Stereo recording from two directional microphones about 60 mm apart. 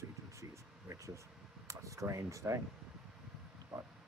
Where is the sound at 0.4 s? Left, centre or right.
Right.